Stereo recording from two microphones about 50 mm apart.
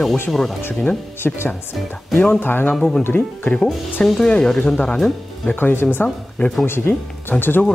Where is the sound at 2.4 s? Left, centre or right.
Left.